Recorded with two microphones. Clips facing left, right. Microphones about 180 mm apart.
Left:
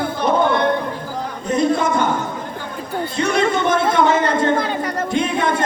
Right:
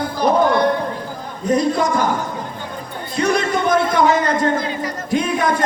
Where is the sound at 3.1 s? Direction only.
25° left (ahead or behind).